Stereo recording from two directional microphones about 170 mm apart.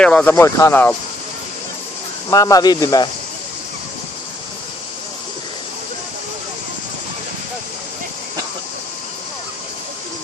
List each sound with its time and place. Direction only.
0.0 s speech: 10° left (ahead or behind)
2.3 s a man's voice: 20° left (ahead or behind)